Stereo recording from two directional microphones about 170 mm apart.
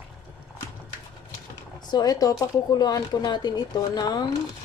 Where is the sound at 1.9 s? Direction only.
20° left (ahead or behind).